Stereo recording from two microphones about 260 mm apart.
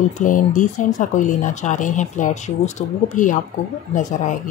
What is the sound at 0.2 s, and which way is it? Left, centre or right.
Speech, left.